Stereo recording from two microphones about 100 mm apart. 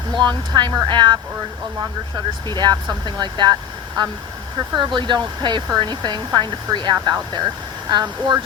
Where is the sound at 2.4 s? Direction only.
45° right (ahead or behind).